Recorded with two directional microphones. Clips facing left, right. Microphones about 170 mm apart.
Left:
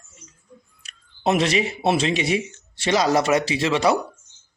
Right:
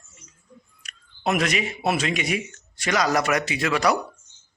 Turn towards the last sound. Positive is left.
turn(degrees=25)  # may be behind; listen again after turning